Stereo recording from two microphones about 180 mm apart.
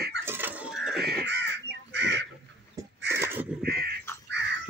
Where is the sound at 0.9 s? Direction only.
65° right (ahead or behind).